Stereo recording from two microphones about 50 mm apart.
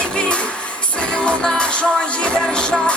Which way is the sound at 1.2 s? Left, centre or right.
Centre.